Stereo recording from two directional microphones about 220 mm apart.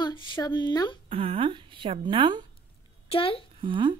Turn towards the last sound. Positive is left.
turn(degrees=-20)  # may be behind; listen again after turning